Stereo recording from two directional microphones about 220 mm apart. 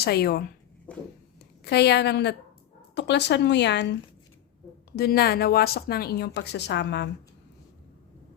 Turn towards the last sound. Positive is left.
turn(degrees=50)  # may be behind; listen again after turning